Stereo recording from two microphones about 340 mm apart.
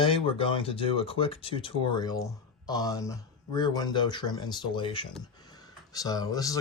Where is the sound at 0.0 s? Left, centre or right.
Centre.